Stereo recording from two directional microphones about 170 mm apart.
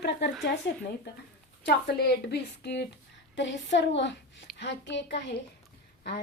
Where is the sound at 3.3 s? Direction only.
90° left.